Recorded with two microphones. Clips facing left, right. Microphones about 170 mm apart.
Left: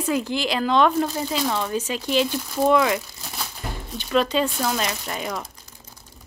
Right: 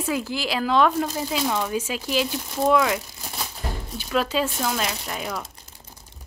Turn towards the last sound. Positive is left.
turn(degrees=0)  # may be behind; listen again after turning